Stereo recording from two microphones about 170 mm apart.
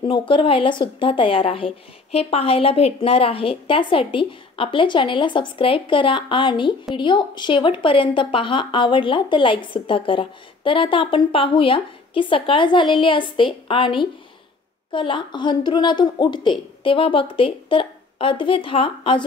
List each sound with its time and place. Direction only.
0.3 s a woman's voice: 30° left (ahead or behind)